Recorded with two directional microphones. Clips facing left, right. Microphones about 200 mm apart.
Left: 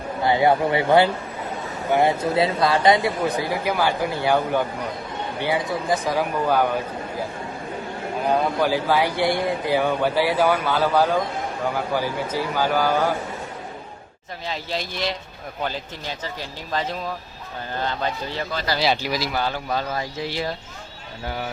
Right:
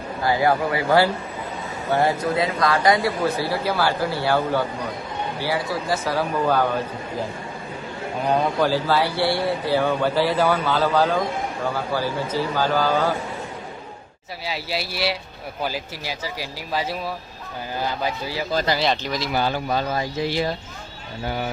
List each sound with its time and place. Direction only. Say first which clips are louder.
0.2 s a man's voice: left 2 dB; 25° left (ahead or behind)
8.5 s speech: even; 15° left (ahead or behind)
14.4 s speech: right 1 dB; 10° right (ahead or behind)
18.8 s speech: left 1 dB; 5° left (ahead or behind)
19.3 s speech: right 2 dB; 10° right (ahead or behind)